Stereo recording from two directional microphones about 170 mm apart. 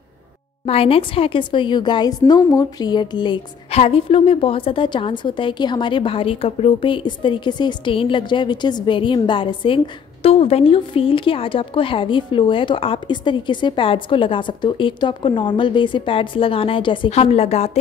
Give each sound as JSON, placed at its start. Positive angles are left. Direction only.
{"t": 0.7, "sound": "a woman's voice", "side_deg": 35}